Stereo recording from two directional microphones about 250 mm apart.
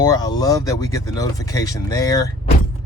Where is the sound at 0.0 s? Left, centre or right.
Centre.